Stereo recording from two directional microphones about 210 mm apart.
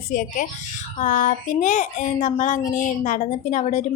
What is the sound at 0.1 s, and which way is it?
Speech, 40° left (ahead or behind).